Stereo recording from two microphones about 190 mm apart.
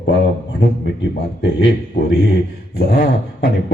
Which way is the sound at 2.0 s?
60° left (ahead or behind).